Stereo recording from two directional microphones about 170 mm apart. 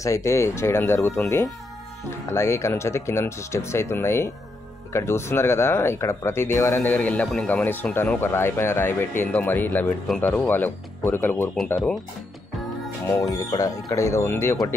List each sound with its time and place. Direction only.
0.0 s speech: 20° left (ahead or behind)
2.2 s speech: 15° left (ahead or behind)
13.3 s speech: 20° left (ahead or behind)